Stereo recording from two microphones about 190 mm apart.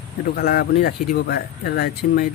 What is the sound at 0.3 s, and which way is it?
Speech, 55° left (ahead or behind).